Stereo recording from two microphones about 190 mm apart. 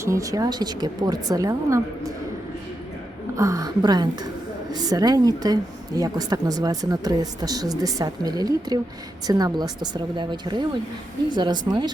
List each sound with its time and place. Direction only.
0.0 s a woman's voice: 15° right (ahead or behind)
3.3 s a woman's voice: 15° right (ahead or behind)